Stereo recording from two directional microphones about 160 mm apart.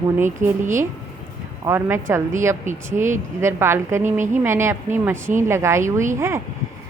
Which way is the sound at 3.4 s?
15° right (ahead or behind).